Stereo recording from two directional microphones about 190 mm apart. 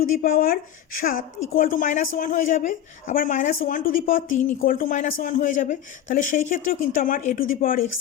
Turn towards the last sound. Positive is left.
turn(degrees=50)  # may be behind; listen again after turning